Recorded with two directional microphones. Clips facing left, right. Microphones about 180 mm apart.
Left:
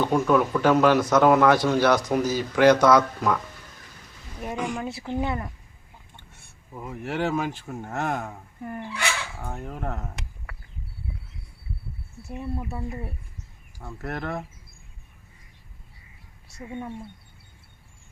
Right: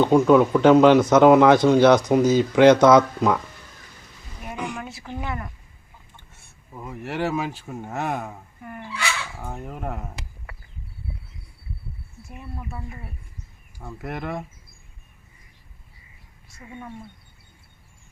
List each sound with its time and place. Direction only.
0.0 s speech: 20° right (ahead or behind)
4.5 s speech: centre (ahead or behind)
5.0 s speech: 25° left (ahead or behind)
6.7 s speech: centre (ahead or behind)
9.4 s speech: 5° right (ahead or behind)
13.7 s speech: 10° right (ahead or behind)